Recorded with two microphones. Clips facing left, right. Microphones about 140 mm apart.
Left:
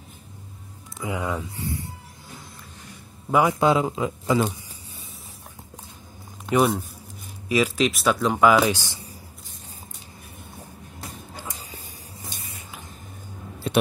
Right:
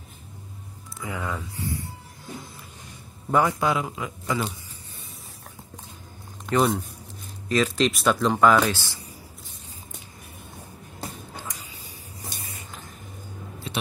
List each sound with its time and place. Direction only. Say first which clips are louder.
0.9 s speech: left 4 dB; 20° left (ahead or behind)
3.3 s a man's voice: left 2 dB; 10° left (ahead or behind)
3.5 s speech: left 5 dB; 25° left (ahead or behind)
6.4 s speech: left 2 dB; 5° left (ahead or behind)
13.7 s a sound: left 10 dB; 50° left (ahead or behind)